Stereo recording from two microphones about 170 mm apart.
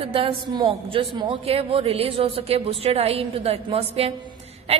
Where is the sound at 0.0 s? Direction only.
35° right (ahead or behind).